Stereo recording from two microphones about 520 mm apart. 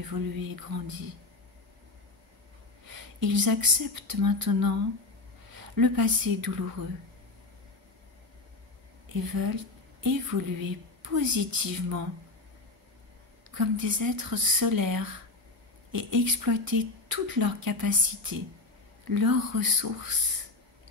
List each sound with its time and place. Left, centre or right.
0.0 s a woman's voice: right
2.9 s speech: right
9.1 s a woman's voice: right
13.6 s a woman's voice: right